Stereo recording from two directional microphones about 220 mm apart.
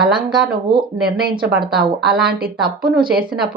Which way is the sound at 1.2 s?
45° right (ahead or behind).